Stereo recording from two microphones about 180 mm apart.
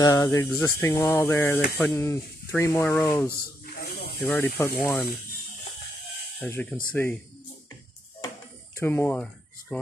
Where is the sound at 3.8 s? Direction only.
60° left (ahead or behind).